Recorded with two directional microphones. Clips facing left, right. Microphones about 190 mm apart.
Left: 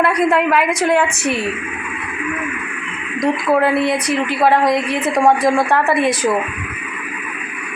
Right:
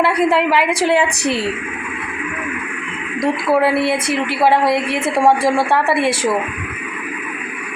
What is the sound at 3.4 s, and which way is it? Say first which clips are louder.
A woman's voice: right 1 dB; 5° right (ahead or behind).